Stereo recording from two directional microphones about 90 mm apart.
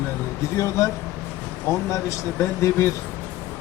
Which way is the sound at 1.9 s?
35° left (ahead or behind).